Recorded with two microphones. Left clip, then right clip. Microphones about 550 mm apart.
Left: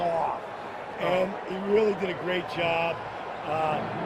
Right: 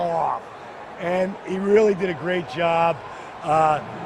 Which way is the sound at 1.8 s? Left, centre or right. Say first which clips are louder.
Right 6 dB; right.